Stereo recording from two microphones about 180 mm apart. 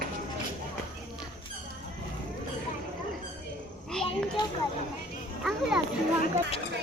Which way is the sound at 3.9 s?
5° left (ahead or behind).